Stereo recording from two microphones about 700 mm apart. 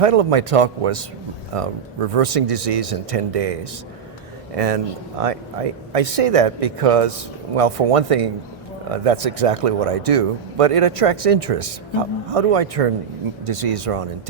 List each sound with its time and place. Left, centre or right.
0.0 s speech: right